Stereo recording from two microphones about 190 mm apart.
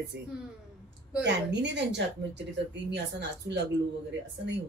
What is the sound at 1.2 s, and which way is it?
A woman's voice, 65° right (ahead or behind).